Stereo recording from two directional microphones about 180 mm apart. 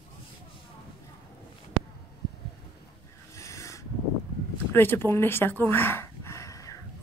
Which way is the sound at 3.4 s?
15° left (ahead or behind).